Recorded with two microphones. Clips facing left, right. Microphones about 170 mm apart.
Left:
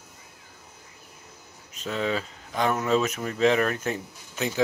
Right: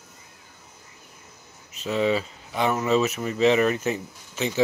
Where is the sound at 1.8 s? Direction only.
5° right (ahead or behind).